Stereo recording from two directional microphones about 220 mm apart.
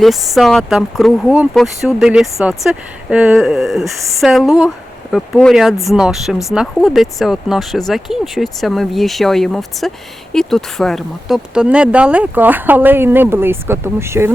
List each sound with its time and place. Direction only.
0.0 s speech: centre (ahead or behind)